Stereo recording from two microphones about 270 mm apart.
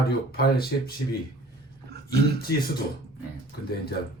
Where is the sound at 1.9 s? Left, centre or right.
Right.